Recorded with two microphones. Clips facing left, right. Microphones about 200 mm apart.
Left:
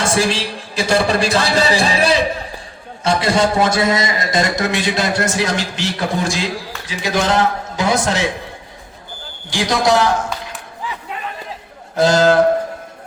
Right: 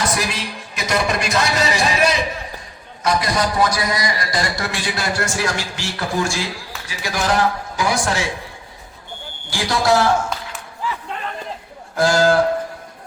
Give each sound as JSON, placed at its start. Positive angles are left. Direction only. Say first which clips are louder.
{"t": 0.0, "sound": "a man's voice", "louder": "left 5 dB", "side_deg": 30}
{"t": 9.5, "sound": "a man's voice", "louder": "left 2 dB", "side_deg": 20}
{"t": 11.9, "sound": "a man's voice", "louder": "left 3 dB", "side_deg": 20}